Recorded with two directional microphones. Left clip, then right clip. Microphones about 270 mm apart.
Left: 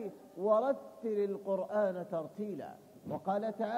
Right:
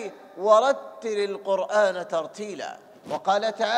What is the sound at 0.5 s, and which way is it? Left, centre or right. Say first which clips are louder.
A man's voice: right 12 dB; centre.